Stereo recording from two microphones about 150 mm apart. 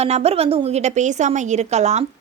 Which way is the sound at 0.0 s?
45° right (ahead or behind).